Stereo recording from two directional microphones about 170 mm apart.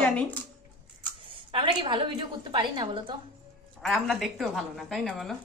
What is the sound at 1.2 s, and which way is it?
A woman's voice, 30° right (ahead or behind).